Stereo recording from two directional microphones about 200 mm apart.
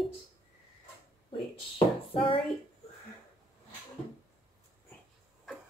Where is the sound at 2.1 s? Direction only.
25° left (ahead or behind).